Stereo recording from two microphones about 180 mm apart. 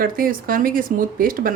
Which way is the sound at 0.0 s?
50° right (ahead or behind).